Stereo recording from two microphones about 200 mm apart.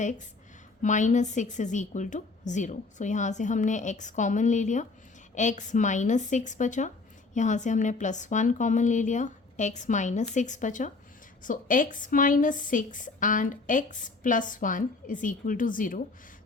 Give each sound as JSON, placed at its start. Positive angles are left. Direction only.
{"t": 0.8, "sound": "a woman's voice", "side_deg": 40}